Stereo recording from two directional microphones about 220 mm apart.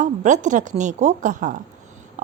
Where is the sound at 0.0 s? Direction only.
35° right (ahead or behind).